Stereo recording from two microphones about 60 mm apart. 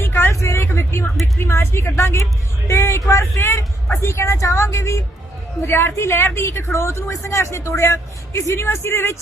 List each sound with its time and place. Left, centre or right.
0.0 s vehicle: left
0.3 s vehicle: left
1.4 s speech: left